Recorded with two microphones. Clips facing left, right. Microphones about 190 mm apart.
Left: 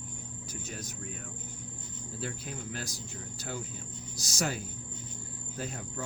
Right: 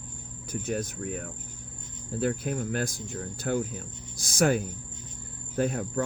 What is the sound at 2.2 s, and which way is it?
Speech, 55° right (ahead or behind).